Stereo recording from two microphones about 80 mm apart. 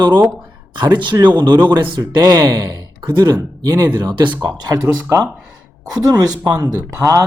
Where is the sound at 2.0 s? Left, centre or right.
Right.